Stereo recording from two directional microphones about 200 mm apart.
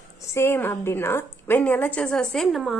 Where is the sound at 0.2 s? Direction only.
15° left (ahead or behind).